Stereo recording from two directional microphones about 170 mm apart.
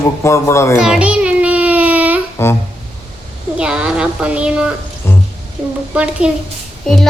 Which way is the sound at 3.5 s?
5° right (ahead or behind).